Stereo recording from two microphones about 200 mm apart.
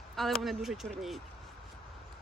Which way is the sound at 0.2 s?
Centre (ahead or behind).